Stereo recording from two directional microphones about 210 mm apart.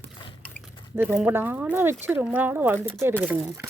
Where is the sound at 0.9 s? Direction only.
5° right (ahead or behind).